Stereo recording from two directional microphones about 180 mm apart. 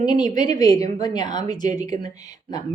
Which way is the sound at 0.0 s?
25° left (ahead or behind).